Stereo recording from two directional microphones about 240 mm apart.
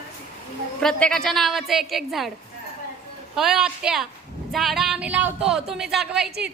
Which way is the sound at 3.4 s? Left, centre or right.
Centre.